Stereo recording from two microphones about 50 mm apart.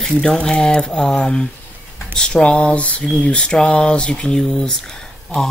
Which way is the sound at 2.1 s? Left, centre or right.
Left.